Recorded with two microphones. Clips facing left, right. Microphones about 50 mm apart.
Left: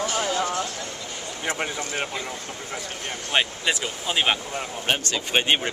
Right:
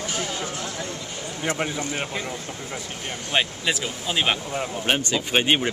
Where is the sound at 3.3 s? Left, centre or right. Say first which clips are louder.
Even; centre.